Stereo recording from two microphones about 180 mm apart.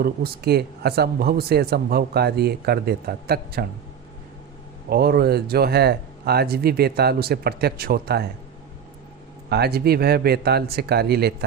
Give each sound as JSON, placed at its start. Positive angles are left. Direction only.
{"t": 0.0, "sound": "speech", "side_deg": -60}
{"t": 4.9, "sound": "speech", "side_deg": -60}
{"t": 9.5, "sound": "speech", "side_deg": -60}